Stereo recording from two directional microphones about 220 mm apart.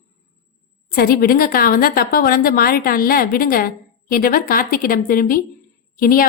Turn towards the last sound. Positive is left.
turn(degrees=40)  # may be behind; listen again after turning